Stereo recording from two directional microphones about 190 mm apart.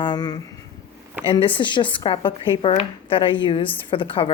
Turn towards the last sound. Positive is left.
turn(degrees=30)  # may be behind; listen again after turning